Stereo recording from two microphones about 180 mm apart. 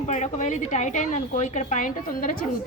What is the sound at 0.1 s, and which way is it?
A woman's voice, 40° left (ahead or behind).